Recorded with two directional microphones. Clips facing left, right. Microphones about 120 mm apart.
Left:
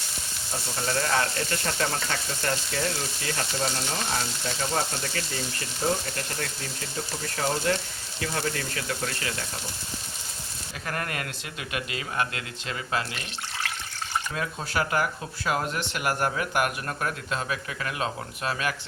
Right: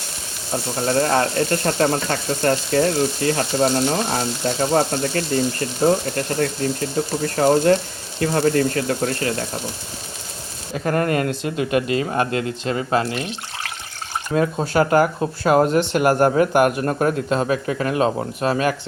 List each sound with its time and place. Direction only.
0.5 s frying: 40° right (ahead or behind)
8.2 s speech: 40° right (ahead or behind)
10.8 s speech: 35° right (ahead or behind)
14.3 s speech: 35° right (ahead or behind)
14.8 s speech: 40° right (ahead or behind)